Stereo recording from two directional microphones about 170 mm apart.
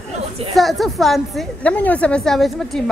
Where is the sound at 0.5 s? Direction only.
Centre (ahead or behind).